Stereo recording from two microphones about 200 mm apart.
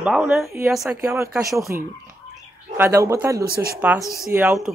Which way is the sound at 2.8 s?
15° right (ahead or behind).